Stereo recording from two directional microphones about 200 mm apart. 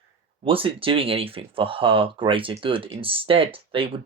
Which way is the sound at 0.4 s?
25° right (ahead or behind).